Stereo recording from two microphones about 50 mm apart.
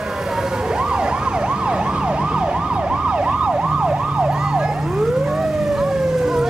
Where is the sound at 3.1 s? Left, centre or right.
Centre.